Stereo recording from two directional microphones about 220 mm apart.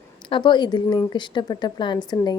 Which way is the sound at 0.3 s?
20° left (ahead or behind).